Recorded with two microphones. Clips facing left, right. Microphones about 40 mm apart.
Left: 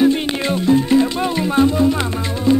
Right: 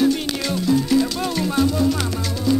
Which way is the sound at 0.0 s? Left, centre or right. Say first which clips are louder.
Left 4 dB; left.